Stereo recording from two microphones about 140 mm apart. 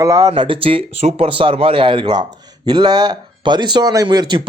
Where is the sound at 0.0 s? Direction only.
25° right (ahead or behind).